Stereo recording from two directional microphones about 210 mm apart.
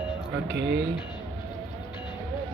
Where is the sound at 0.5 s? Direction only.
55° right (ahead or behind).